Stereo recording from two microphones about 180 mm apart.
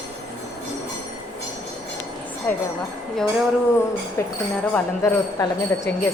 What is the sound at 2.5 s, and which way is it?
Speech, 10° left (ahead or behind).